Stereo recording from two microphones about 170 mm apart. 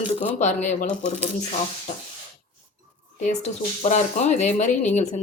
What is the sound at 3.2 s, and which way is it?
A woman's voice, 45° left (ahead or behind).